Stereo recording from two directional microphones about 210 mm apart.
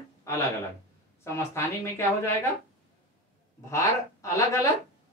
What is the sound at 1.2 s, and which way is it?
A woman's voice, 10° left (ahead or behind).